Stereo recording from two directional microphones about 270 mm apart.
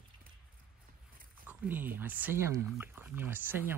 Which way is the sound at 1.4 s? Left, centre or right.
Centre.